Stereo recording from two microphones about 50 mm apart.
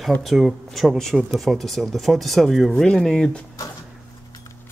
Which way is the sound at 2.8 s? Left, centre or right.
Centre.